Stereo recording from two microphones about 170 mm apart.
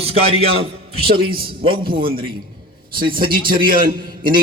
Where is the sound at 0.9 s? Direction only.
65° right (ahead or behind).